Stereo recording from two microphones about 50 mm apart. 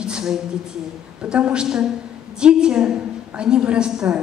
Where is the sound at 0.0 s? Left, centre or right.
Centre.